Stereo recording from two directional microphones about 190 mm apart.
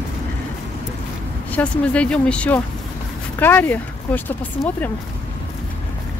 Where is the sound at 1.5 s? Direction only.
5° left (ahead or behind).